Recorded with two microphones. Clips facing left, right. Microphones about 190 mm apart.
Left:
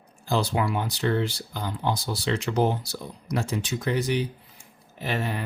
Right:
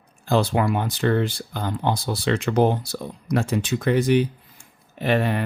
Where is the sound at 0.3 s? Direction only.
55° right (ahead or behind).